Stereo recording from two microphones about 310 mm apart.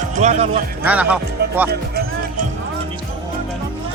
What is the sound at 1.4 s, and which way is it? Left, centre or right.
Speech, right.